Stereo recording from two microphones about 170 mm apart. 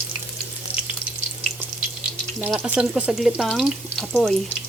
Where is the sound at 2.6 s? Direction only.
5° right (ahead or behind).